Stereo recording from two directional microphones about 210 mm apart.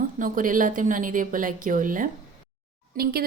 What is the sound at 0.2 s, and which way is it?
Speech, 40° right (ahead or behind).